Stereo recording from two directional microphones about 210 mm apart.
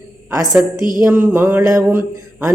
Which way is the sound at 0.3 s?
15° right (ahead or behind).